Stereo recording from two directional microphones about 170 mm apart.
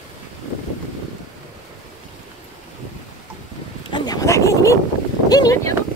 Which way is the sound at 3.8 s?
25° left (ahead or behind).